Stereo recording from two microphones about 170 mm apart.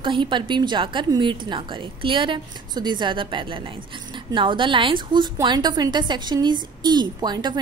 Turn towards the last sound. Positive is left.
turn(degrees=-25)  # may be behind; listen again after turning